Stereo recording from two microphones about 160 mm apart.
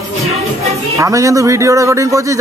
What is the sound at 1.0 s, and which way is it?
Speech, 20° right (ahead or behind).